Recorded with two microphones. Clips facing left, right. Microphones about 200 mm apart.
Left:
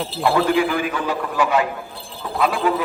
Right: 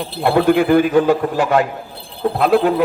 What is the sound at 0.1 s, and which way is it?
A man's voice, 60° right (ahead or behind).